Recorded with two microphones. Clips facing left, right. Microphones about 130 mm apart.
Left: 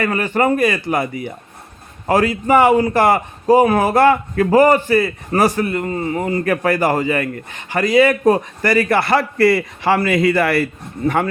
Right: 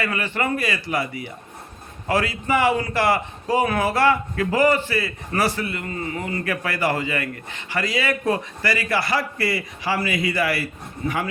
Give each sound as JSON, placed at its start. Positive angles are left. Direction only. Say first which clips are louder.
{"t": 0.0, "sound": "a man's voice", "louder": "left 8 dB", "side_deg": 45}